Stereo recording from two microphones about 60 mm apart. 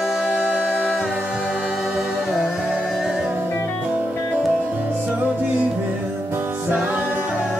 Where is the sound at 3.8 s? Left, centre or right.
Right.